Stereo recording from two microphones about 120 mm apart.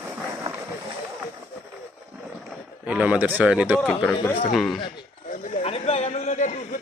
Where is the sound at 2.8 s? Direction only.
10° right (ahead or behind).